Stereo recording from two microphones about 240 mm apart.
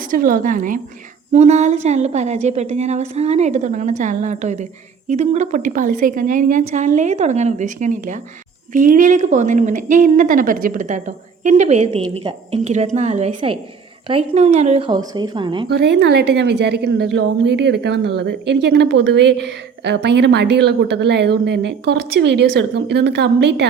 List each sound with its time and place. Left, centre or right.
0.1 s a woman's voice: right; by 15.7 s centre
15.7 s a woman's voice: right